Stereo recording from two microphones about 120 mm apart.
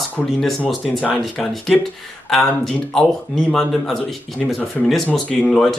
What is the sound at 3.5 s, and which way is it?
Speech, 5° left (ahead or behind).